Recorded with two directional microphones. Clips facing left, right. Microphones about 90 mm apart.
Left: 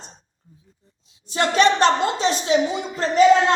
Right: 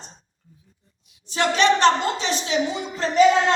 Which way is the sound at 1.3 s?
45° left (ahead or behind).